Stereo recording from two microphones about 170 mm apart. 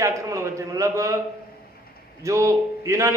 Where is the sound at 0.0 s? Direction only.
20° right (ahead or behind).